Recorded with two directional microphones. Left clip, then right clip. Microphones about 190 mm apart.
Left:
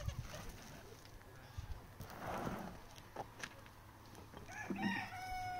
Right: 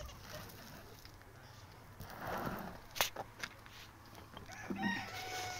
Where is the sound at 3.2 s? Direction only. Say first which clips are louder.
Right 3 dB; 5° right (ahead or behind).